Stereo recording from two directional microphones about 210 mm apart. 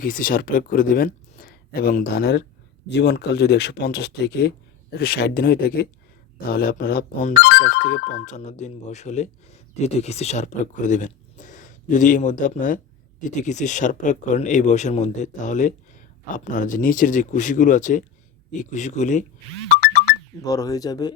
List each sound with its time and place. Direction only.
0.0 s speech: 40° left (ahead or behind)
20.4 s speech: 15° left (ahead or behind)